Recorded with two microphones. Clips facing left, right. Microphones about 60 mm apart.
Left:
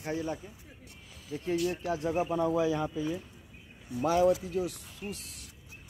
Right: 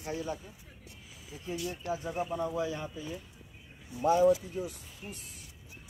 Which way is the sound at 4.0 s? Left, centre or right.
Left.